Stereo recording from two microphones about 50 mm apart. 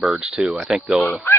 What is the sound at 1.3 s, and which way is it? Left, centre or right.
Speech, left.